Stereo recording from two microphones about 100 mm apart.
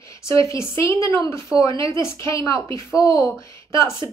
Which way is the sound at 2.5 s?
55° right (ahead or behind).